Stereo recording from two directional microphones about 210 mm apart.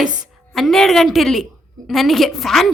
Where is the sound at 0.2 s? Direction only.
Centre (ahead or behind).